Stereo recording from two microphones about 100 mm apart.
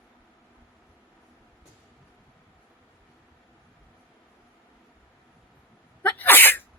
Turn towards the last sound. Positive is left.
turn(degrees=20)  # may be behind; listen again after turning